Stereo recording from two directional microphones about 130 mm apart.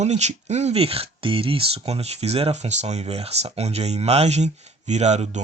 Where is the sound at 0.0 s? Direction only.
60° right (ahead or behind).